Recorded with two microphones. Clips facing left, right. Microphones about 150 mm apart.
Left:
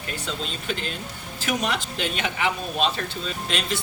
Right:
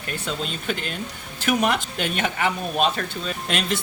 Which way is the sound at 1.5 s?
55° right (ahead or behind).